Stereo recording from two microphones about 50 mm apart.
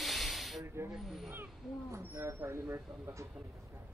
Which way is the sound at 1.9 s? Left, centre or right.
Right.